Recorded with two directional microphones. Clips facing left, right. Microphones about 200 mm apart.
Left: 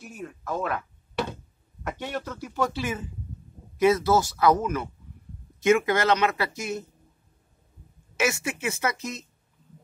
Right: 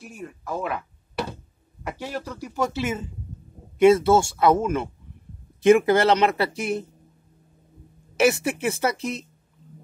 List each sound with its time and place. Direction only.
0.0 s speech: 5° right (ahead or behind)
2.7 s speech: 25° right (ahead or behind)
8.2 s speech: 35° right (ahead or behind)